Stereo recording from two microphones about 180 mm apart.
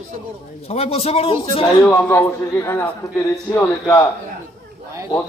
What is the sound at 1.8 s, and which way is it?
A man's voice, 10° left (ahead or behind).